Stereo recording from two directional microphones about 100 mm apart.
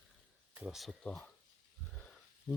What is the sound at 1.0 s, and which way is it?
Speech, 10° left (ahead or behind).